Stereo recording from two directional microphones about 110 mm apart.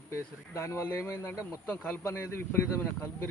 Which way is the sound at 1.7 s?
15° left (ahead or behind).